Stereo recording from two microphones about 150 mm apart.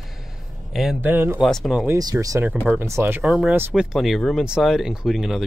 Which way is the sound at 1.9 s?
25° right (ahead or behind).